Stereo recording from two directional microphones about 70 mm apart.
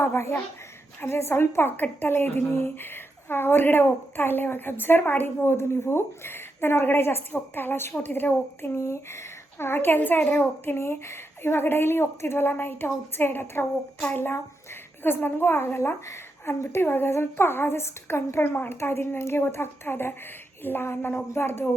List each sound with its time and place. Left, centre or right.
0.0 s a child's voice: left